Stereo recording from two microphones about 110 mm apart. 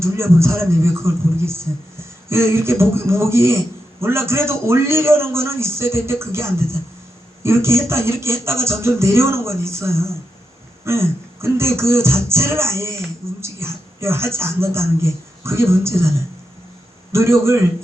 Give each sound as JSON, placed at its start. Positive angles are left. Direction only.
{"t": 0.0, "sound": "speech", "side_deg": -25}